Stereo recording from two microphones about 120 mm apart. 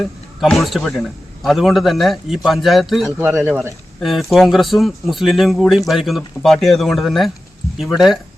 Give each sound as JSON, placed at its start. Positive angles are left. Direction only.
{"t": 0.0, "sound": "speech", "side_deg": 0}
{"t": 3.4, "sound": "speech", "side_deg": -15}
{"t": 4.0, "sound": "speech", "side_deg": 0}